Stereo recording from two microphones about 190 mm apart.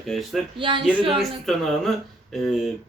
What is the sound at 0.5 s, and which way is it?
Speech, 25° right (ahead or behind).